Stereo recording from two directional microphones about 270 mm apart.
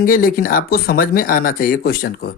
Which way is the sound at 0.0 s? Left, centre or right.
Left.